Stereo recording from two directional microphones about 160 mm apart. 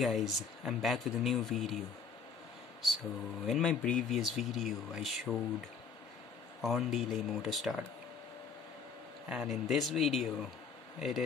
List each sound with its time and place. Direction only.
0.0 s speech: centre (ahead or behind)
3.4 s speech: centre (ahead or behind)
6.6 s speech: centre (ahead or behind)
9.3 s speech: 5° right (ahead or behind)